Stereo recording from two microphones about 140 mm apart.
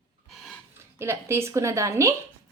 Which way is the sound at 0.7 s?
20° right (ahead or behind).